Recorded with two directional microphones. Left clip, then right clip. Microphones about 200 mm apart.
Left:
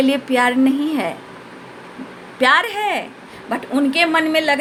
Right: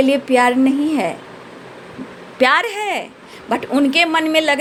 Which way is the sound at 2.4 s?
35° right (ahead or behind).